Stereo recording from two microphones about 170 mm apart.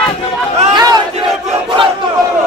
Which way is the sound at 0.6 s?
25° right (ahead or behind).